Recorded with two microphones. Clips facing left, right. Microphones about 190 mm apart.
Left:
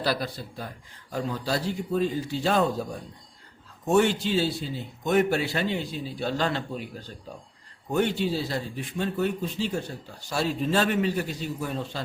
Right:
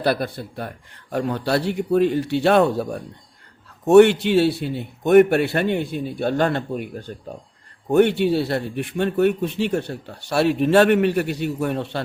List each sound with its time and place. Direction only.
0.0 s a man's voice: 55° right (ahead or behind)